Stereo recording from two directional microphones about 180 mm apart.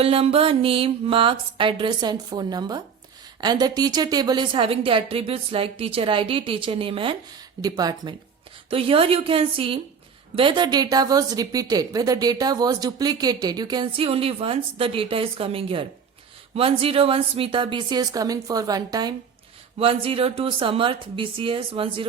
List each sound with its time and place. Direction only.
0.0 s a woman's voice: 30° right (ahead or behind)
8.7 s a woman's voice: 30° right (ahead or behind)
19.8 s a woman's voice: 30° right (ahead or behind)